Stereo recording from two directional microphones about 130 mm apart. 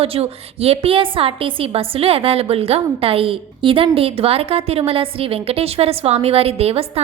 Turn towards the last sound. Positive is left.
turn(degrees=-50)  # may be behind; listen again after turning